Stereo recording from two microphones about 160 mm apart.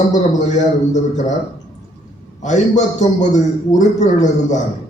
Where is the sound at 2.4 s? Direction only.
50° left (ahead or behind).